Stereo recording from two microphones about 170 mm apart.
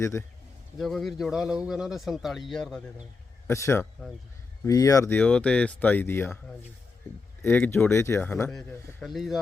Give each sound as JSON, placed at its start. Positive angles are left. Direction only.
{"t": 0.0, "sound": "speech", "side_deg": 15}
{"t": 0.8, "sound": "a man's voice", "side_deg": 0}
{"t": 3.4, "sound": "speech", "side_deg": 15}
{"t": 9.0, "sound": "a man's voice", "side_deg": 0}